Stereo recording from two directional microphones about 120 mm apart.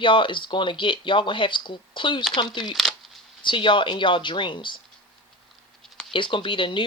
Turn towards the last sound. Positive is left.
turn(degrees=45)  # may be behind; listen again after turning